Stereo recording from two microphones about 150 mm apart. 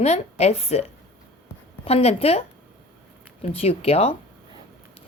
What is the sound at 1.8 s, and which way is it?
Speech, 45° left (ahead or behind).